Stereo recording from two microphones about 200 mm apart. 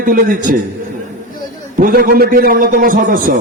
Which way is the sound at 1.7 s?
45° right (ahead or behind).